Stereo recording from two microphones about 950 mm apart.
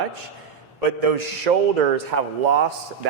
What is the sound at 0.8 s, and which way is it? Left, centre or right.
A man's voice, right.